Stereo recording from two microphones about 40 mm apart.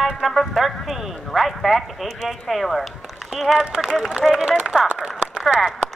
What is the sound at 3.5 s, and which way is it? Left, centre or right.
Speech, right.